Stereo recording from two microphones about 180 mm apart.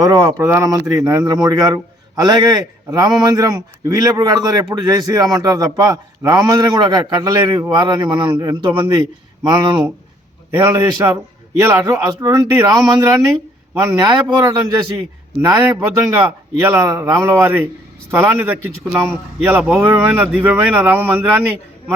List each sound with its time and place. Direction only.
0.0 s a man's voice: 15° right (ahead or behind)
10.5 s a man's voice: 15° right (ahead or behind)